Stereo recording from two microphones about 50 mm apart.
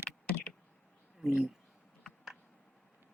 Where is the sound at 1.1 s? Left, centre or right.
Centre.